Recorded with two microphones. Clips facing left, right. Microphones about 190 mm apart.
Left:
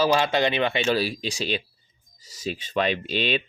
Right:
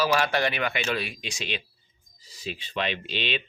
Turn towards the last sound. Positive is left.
turn(degrees=45)  # may be behind; listen again after turning